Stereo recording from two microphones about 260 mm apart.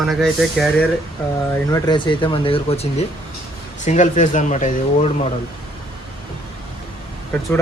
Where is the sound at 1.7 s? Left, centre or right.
Centre.